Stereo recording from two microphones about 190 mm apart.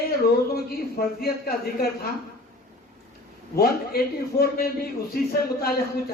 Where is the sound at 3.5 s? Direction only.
55° left (ahead or behind).